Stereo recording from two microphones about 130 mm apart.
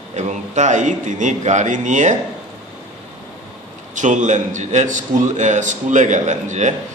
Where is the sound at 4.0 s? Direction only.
70° right (ahead or behind).